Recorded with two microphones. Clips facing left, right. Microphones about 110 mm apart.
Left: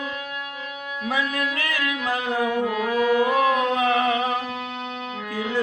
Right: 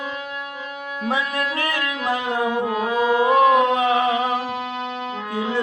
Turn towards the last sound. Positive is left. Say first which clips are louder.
# right 2 dB
turn(degrees=-25)  # may be behind; listen again after turning